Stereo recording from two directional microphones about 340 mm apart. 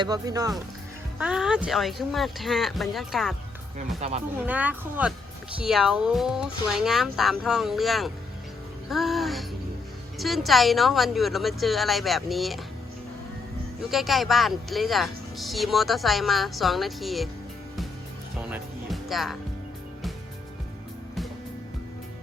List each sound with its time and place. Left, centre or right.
0.0 s a woman's voice: centre
3.8 s speech: centre
4.4 s a woman's voice: centre
13.9 s a woman's voice: centre
18.5 s music: centre